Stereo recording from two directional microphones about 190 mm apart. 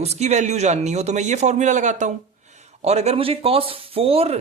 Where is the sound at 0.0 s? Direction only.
35° right (ahead or behind).